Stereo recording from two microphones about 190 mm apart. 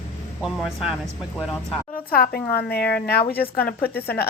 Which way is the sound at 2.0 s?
50° left (ahead or behind).